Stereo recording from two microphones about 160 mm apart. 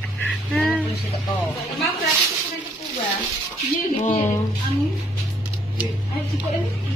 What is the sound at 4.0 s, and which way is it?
Speech, 50° left (ahead or behind).